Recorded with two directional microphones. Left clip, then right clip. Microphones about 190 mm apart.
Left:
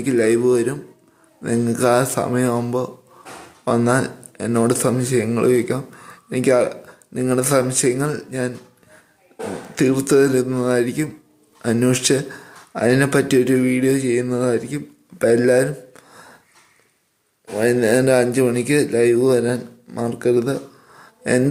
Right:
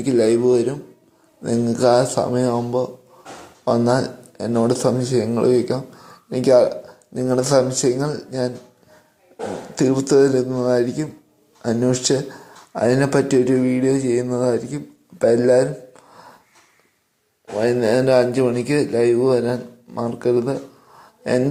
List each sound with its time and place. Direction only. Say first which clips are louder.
0.0 s a man's voice: even; centre (ahead or behind)
3.7 s speech: even; 30° left (ahead or behind)
4.0 s a man's voice: even; 10° left (ahead or behind)
9.7 s a man's voice: even; 10° left (ahead or behind)
15.2 s a sound: even; 15° left (ahead or behind)
17.6 s a man's voice: left 1 dB; 15° left (ahead or behind)
21.0 s a sound: left 1 dB; 20° left (ahead or behind)